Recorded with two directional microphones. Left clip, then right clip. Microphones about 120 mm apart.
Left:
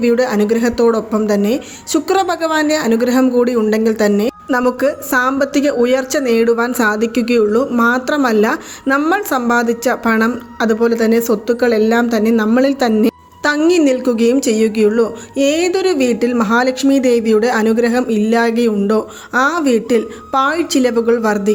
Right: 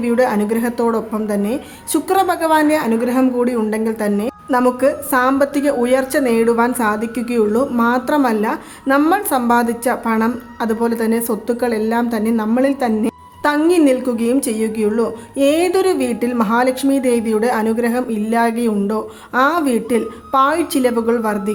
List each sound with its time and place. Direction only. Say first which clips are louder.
0.0 s a woman's voice: left 2 dB; 30° left (ahead or behind)
9.0 s a woman's voice: even; 15° left (ahead or behind)
10.7 s a woman's voice: left 5 dB; 15° left (ahead or behind)